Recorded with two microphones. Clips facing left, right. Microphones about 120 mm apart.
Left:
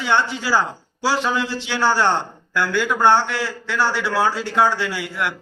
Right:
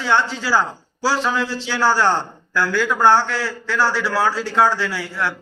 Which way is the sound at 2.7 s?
20° left (ahead or behind).